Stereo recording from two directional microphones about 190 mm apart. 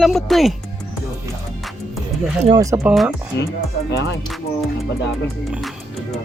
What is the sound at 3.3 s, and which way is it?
Speech, 65° left (ahead or behind).